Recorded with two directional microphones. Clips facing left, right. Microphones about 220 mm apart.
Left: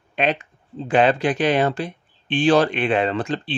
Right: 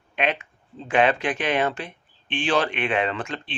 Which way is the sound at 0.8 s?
35° left (ahead or behind).